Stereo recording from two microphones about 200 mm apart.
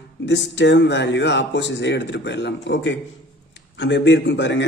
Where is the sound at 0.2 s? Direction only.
60° left (ahead or behind).